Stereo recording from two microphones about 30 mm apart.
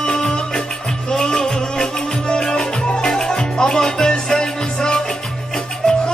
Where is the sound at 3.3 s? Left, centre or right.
Left.